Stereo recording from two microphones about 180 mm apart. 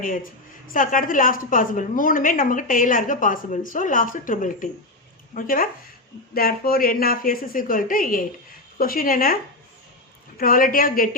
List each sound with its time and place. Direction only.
0.0 s a woman's voice: 50° left (ahead or behind)